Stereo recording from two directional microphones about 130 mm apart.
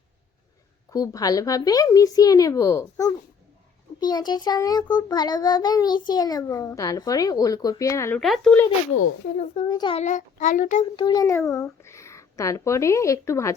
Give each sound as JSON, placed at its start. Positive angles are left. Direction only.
{"t": 0.9, "sound": "a child's voice", "side_deg": 25}
{"t": 8.2, "sound": "speech", "side_deg": 5}
{"t": 9.6, "sound": "a child's voice", "side_deg": 35}
{"t": 10.0, "sound": "a child's voice", "side_deg": 70}
{"t": 10.9, "sound": "a child's voice", "side_deg": 35}